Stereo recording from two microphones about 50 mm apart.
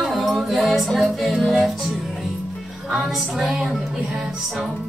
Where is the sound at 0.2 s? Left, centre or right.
Centre.